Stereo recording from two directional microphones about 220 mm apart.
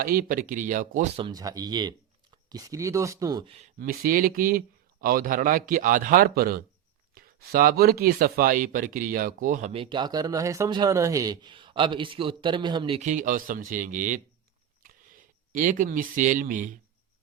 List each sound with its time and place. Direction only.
0.0 s speech: 40° right (ahead or behind); by 3.7 s 25° right (ahead or behind)
3.8 s speech: 40° right (ahead or behind)